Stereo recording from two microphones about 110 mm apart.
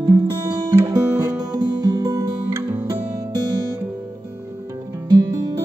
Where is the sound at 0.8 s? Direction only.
35° right (ahead or behind).